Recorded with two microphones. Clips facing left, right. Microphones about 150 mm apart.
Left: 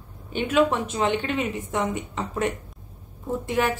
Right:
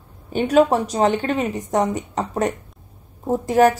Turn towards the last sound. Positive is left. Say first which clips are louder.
# right 9 dB
turn(degrees=-40)  # may be behind; listen again after turning